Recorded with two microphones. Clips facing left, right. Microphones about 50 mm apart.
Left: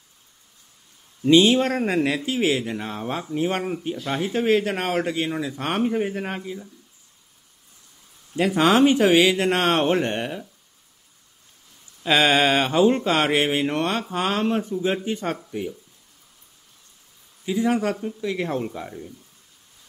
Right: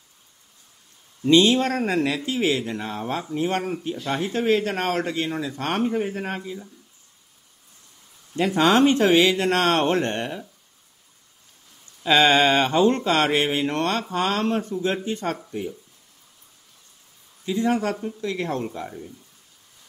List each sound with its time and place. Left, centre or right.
1.2 s speech: centre
8.4 s speech: centre
12.0 s speech: centre
17.5 s speech: centre